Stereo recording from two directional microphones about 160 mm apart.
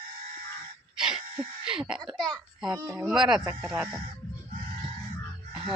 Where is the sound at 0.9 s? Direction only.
5° right (ahead or behind).